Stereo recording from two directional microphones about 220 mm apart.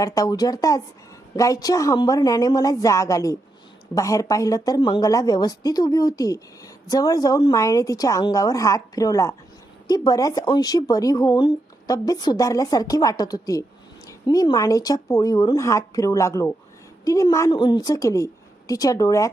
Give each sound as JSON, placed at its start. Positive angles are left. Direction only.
{"t": 0.0, "sound": "speech", "side_deg": 15}